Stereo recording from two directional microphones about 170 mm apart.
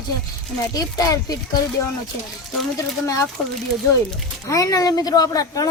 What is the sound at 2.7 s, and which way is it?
Speech, 20° left (ahead or behind).